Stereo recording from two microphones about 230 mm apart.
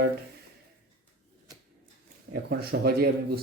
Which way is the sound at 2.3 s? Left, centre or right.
Right.